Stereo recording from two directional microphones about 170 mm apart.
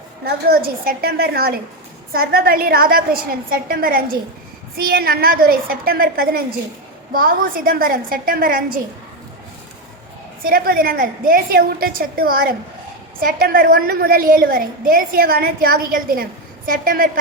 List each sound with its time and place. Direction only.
0.3 s a woman's voice: 65° right (ahead or behind)
10.4 s a woman's voice: 60° right (ahead or behind)